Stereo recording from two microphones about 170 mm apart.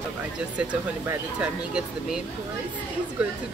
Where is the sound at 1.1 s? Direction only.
5° right (ahead or behind).